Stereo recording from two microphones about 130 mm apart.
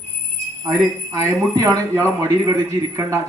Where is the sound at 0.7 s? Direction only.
25° right (ahead or behind).